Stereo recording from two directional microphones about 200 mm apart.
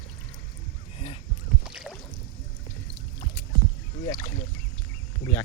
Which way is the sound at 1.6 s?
Centre (ahead or behind).